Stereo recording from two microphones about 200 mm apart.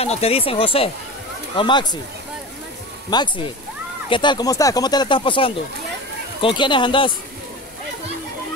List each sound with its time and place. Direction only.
0.0 s speech: 30° left (ahead or behind)
3.1 s speech: 20° left (ahead or behind)